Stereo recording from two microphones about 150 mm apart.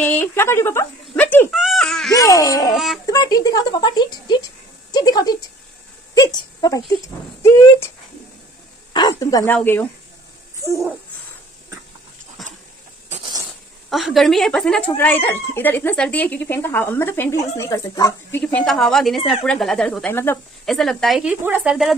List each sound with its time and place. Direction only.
0.0 s speech: 15° left (ahead or behind)
1.5 s giggle: centre (ahead or behind)
2.1 s speech: 20° left (ahead or behind)
2.7 s speech: centre (ahead or behind)
3.1 s speech: 25° left (ahead or behind)
8.9 s speech: 25° left (ahead or behind)
9.5 s speech: 10° left (ahead or behind)
12.4 s a sound: centre (ahead or behind)
13.8 s speech: centre (ahead or behind); by 18.4 s 20° left (ahead or behind)
18.4 s speech: 5° left (ahead or behind)